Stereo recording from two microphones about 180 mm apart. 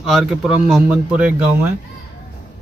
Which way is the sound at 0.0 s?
Centre (ahead or behind).